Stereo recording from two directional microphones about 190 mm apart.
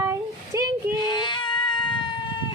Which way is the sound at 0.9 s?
20° left (ahead or behind).